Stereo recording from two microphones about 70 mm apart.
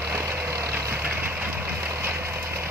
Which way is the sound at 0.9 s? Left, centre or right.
Right.